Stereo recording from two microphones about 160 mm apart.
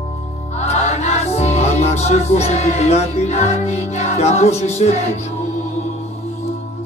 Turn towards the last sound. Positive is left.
turn(degrees=45)  # may be behind; listen again after turning